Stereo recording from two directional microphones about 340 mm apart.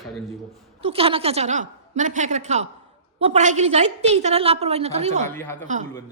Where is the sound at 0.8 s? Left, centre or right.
Centre.